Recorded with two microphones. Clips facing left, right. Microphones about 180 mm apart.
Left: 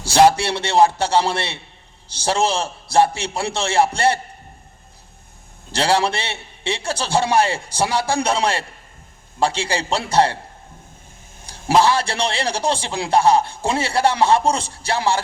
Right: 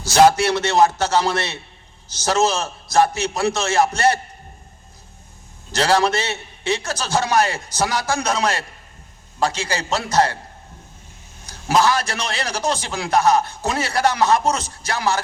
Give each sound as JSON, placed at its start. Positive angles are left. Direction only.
{"t": 0.0, "sound": "a man's voice", "side_deg": 30}
{"t": 5.7, "sound": "a man's voice", "side_deg": 30}
{"t": 11.4, "sound": "a man's voice", "side_deg": 30}